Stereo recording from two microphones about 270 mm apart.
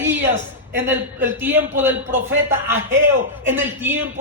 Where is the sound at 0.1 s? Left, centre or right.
Centre.